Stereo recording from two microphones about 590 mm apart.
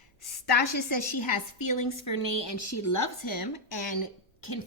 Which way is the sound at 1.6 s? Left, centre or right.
Left.